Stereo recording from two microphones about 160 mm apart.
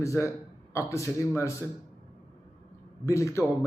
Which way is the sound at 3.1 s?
20° left (ahead or behind).